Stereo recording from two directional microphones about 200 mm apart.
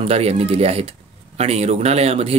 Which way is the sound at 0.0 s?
30° right (ahead or behind).